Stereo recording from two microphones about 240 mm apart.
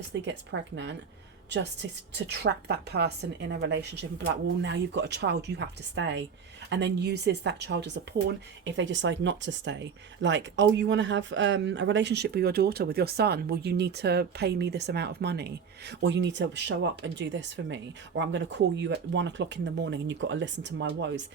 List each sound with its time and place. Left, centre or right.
0.1 s speech: right